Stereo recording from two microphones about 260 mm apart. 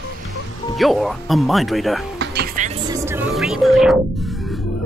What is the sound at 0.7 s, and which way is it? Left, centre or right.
Speech, centre.